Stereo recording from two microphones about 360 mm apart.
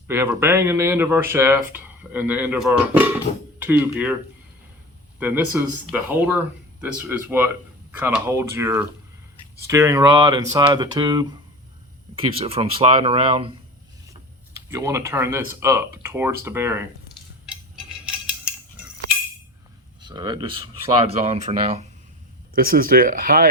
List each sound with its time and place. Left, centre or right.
0.1 s speech: centre
5.2 s speech: centre
18.0 s cutlery: centre
20.0 s speech: centre